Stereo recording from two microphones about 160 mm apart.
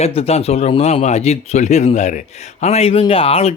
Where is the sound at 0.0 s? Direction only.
40° left (ahead or behind).